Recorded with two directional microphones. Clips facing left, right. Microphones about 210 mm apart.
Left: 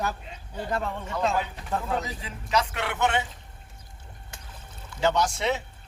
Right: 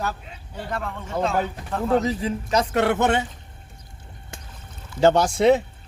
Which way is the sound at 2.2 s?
40° right (ahead or behind).